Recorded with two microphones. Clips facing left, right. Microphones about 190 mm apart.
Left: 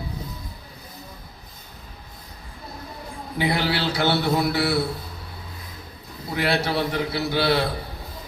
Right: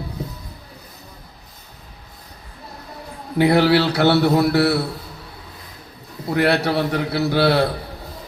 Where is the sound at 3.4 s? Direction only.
60° right (ahead or behind).